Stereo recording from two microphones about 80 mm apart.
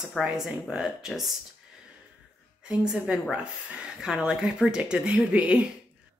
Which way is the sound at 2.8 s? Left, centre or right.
Centre.